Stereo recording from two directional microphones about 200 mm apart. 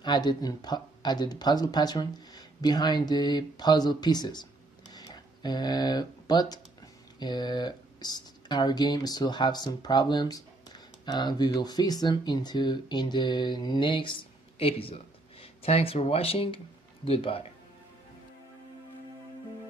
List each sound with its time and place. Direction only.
0.0 s speech: 20° left (ahead or behind)
4.9 s computer keyboard: 20° left (ahead or behind)
7.2 s speech: 20° left (ahead or behind)